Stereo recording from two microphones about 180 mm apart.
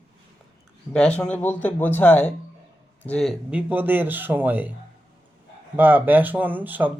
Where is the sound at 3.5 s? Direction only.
10° right (ahead or behind).